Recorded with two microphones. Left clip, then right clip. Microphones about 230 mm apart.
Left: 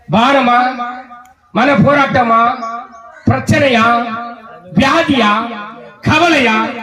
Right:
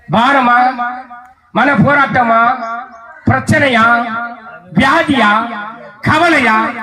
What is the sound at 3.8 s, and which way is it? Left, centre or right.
Speech, right.